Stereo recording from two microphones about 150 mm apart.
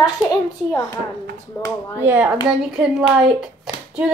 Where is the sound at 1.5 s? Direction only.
10° left (ahead or behind).